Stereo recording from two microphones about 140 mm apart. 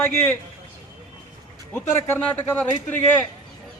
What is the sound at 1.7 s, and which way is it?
Speech, 15° left (ahead or behind).